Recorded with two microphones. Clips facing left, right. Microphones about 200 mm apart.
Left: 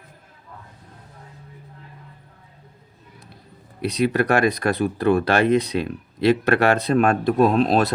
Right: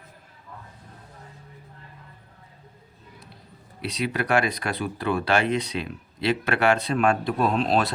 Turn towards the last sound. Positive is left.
turn(degrees=45)  # may be behind; listen again after turning